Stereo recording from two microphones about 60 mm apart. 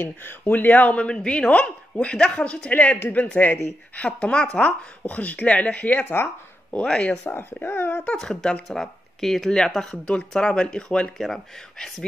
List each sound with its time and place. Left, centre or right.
0.0 s speech: left
1.0 s a woman's voice: centre; by 6.3 s left
6.7 s a woman's voice: centre
7.6 s speech: left
8.2 s a woman's voice: centre